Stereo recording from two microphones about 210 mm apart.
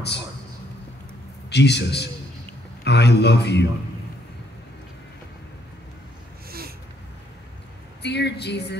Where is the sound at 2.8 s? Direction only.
55° left (ahead or behind).